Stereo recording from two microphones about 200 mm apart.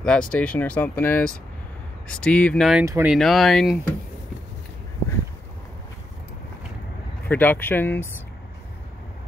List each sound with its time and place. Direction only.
0.0 s speech: 5° left (ahead or behind)
2.8 s speech: 15° right (ahead or behind)
3.1 s speech: centre (ahead or behind)
7.2 s speech: 10° left (ahead or behind)